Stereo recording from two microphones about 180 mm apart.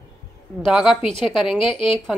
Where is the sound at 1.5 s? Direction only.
30° left (ahead or behind).